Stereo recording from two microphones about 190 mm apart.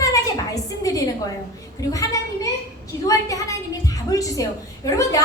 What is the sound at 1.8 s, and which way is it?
A woman's voice, 15° left (ahead or behind).